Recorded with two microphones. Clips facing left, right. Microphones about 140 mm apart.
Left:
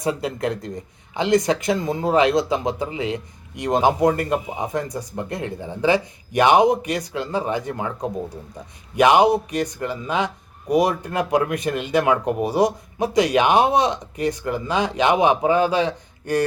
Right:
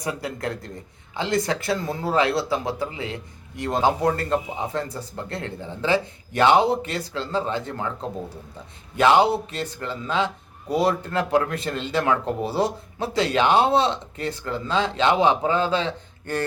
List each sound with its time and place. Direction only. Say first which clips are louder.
0.0 s speech: left 5 dB; 25° left (ahead or behind)